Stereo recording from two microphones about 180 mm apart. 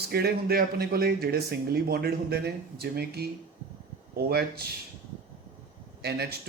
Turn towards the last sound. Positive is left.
turn(degrees=-65)  # may be behind; listen again after turning